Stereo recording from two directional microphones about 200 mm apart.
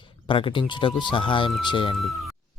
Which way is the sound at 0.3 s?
25° left (ahead or behind).